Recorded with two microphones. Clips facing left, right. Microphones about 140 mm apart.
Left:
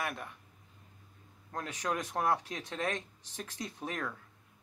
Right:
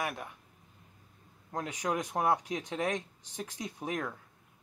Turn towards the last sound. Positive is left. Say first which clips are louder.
# right 3 dB
turn(degrees=-15)  # may be behind; listen again after turning